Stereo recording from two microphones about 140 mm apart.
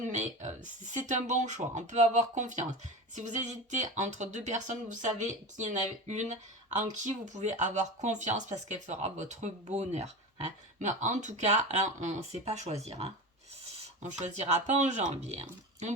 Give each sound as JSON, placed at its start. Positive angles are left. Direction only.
{"t": 0.0, "sound": "speech", "side_deg": -60}